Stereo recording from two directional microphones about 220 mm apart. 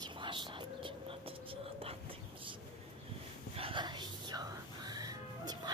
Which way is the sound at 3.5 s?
25° right (ahead or behind).